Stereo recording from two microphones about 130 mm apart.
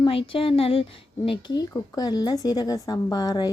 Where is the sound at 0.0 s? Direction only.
45° left (ahead or behind).